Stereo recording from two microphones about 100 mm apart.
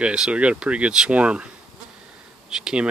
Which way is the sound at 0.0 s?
10° right (ahead or behind).